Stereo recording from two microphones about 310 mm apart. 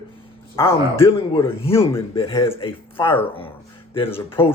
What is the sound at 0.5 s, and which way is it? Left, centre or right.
Speech, centre.